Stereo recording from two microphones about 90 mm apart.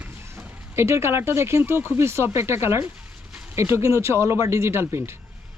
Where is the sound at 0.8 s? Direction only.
30° right (ahead or behind).